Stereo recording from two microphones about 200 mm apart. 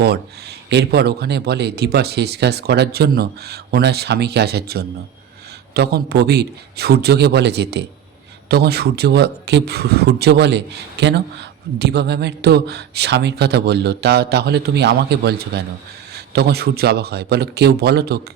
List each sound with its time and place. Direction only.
0.0 s speech: 55° right (ahead or behind)